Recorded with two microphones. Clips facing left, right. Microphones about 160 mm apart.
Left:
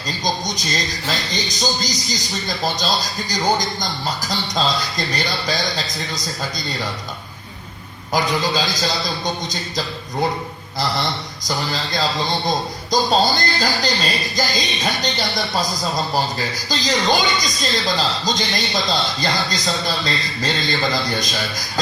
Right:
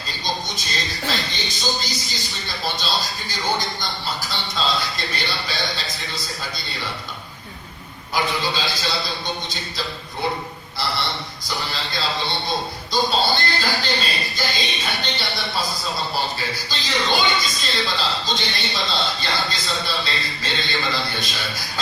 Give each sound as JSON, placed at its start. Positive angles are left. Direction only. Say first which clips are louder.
{"t": 0.4, "sound": "a man's voice", "louder": "left 5 dB", "side_deg": 40}
{"t": 8.1, "sound": "a man's voice", "louder": "left 4 dB", "side_deg": 40}
{"t": 11.4, "sound": "a man's voice", "louder": "left 5 dB", "side_deg": 40}